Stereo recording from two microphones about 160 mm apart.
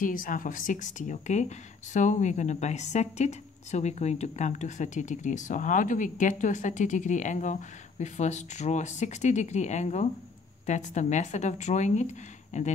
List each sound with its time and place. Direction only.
0.0 s a woman's voice: 60° left (ahead or behind)